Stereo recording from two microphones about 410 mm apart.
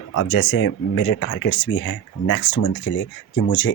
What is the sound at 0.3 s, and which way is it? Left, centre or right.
Speech, left.